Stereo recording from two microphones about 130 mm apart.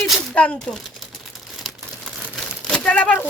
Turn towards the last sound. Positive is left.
turn(degrees=10)  # may be behind; listen again after turning